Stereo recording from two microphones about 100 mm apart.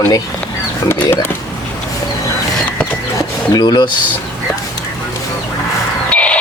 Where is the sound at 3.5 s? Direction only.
45° left (ahead or behind).